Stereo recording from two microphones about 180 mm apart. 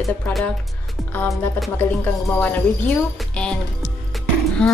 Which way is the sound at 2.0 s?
10° left (ahead or behind).